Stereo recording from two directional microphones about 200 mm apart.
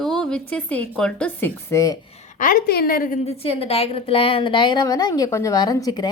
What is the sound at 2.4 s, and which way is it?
Speech, 45° left (ahead or behind).